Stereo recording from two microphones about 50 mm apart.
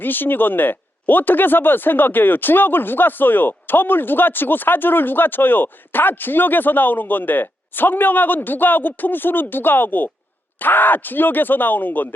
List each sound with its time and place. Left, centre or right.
0.0 s speech: left